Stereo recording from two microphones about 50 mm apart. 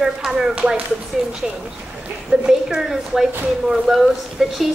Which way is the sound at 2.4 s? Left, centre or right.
Centre.